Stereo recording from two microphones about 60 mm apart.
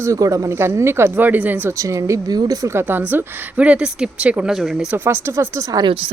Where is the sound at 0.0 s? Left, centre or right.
Right.